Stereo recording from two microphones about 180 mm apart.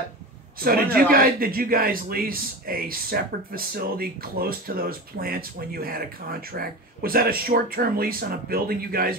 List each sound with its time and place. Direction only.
0.7 s a man's voice: 55° right (ahead or behind)